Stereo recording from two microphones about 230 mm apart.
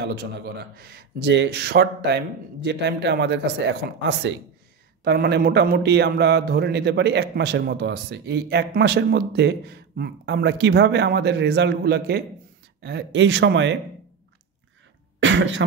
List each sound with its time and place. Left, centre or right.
0.0 s a man's voice: right
15.1 s speech: right